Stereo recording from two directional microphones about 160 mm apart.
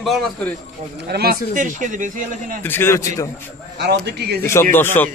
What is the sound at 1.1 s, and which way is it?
Speech, 75° right (ahead or behind).